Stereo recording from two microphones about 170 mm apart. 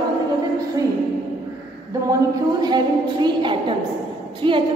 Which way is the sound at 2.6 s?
25° right (ahead or behind).